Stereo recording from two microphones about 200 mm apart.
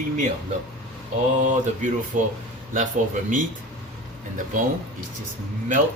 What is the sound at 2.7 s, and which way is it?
Speech, 40° right (ahead or behind).